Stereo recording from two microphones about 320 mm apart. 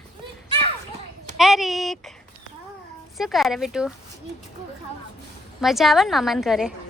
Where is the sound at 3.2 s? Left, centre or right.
Centre.